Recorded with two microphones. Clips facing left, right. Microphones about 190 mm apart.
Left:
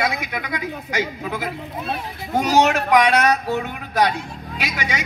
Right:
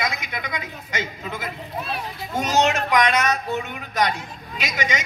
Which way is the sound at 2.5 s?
10° left (ahead or behind).